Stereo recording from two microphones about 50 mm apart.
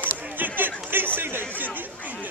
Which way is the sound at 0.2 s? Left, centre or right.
Right.